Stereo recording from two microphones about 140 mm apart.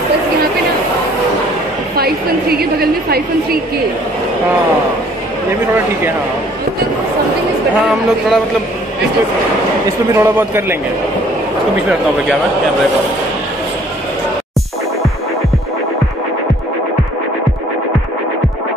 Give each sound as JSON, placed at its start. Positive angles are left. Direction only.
{"t": 2.0, "sound": "a woman's voice", "side_deg": -90}
{"t": 7.8, "sound": "speech", "side_deg": 0}
{"t": 10.1, "sound": "a man's voice", "side_deg": -20}